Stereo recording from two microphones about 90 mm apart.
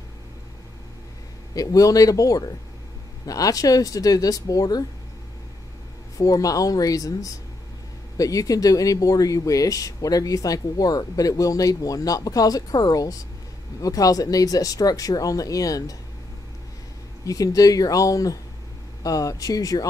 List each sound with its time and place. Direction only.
1.5 s speech: 40° left (ahead or behind)
6.1 s speech: 40° left (ahead or behind)
17.2 s speech: 40° left (ahead or behind)